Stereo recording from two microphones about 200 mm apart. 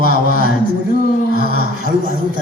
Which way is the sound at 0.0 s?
45° right (ahead or behind).